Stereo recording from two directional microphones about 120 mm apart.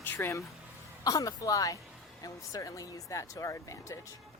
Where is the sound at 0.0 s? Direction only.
20° left (ahead or behind).